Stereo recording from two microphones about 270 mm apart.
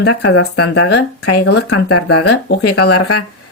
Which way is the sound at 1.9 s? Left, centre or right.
Left.